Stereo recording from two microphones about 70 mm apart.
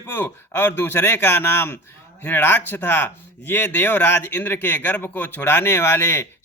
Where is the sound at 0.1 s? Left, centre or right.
Left.